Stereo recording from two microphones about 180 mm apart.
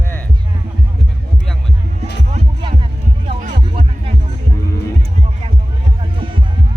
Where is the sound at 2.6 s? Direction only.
30° right (ahead or behind).